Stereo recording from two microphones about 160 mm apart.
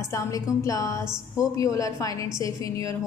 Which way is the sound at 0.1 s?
20° left (ahead or behind).